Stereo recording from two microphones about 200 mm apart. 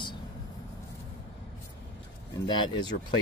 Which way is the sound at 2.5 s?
20° left (ahead or behind).